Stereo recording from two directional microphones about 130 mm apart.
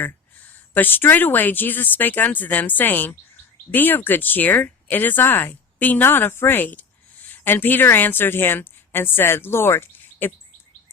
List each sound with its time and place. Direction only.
0.7 s speech: 15° left (ahead or behind)